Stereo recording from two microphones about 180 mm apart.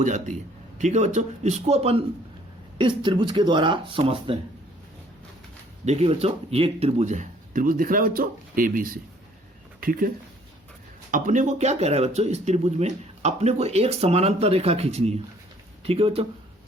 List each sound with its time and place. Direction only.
0.0 s speech: 40° right (ahead or behind)
5.8 s speech: 35° right (ahead or behind); by 10.1 s 50° right (ahead or behind)
11.1 s speech: 45° right (ahead or behind)